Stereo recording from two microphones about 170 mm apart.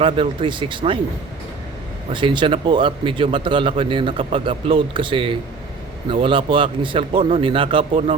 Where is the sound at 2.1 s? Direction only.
30° right (ahead or behind).